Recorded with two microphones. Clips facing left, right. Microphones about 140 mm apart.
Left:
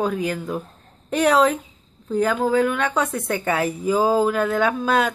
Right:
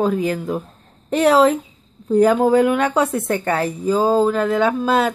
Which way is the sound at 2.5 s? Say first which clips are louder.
Right 4 dB; 10° right (ahead or behind).